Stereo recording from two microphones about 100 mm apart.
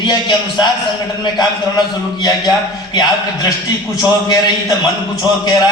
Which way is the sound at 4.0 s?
35° left (ahead or behind).